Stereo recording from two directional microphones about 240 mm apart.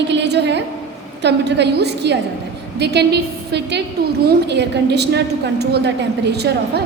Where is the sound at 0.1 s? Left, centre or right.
Right.